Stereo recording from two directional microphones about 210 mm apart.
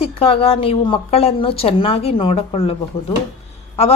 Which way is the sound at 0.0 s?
25° left (ahead or behind).